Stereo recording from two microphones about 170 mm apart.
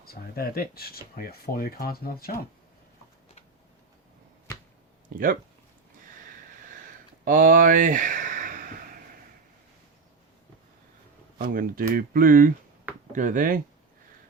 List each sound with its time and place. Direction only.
0.0 s speech: 65° left (ahead or behind)
5.1 s speech: 55° right (ahead or behind)
7.3 s a sound: 50° right (ahead or behind)
11.5 s speech: 60° right (ahead or behind)